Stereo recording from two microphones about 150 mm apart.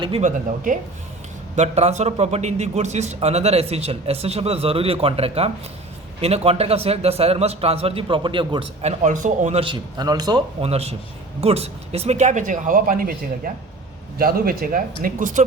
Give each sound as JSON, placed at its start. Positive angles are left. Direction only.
{"t": 0.2, "sound": "speech", "side_deg": -60}
{"t": 1.5, "sound": "a man's voice", "side_deg": -45}
{"t": 9.6, "sound": "a man's voice", "side_deg": -30}
{"t": 10.6, "sound": "a man's voice", "side_deg": -45}